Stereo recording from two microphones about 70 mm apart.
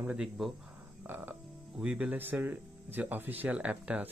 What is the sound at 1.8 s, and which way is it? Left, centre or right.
Speech, centre.